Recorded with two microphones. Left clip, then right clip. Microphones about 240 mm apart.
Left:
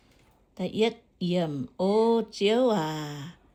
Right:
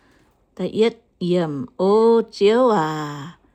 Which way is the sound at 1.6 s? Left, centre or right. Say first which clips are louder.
Right 8 dB; right.